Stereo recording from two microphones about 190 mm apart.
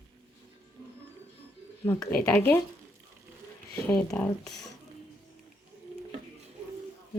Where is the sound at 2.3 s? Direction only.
15° left (ahead or behind).